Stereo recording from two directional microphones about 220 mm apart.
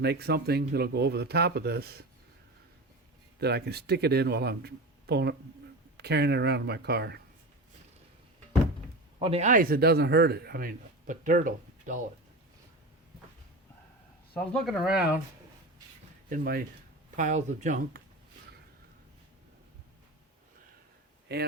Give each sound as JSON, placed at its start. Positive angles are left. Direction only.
{"t": 0.0, "sound": "speech", "side_deg": -45}
{"t": 3.4, "sound": "speech", "side_deg": -45}
{"t": 9.1, "sound": "a man's voice", "side_deg": -25}
{"t": 14.3, "sound": "speech", "side_deg": 0}
{"t": 16.3, "sound": "a man's voice", "side_deg": -40}
{"t": 21.3, "sound": "speech", "side_deg": -45}